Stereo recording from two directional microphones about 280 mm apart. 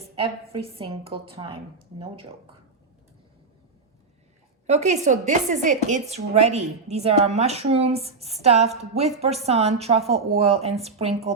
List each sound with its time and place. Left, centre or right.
0.6 s speech: centre
4.6 s speech: right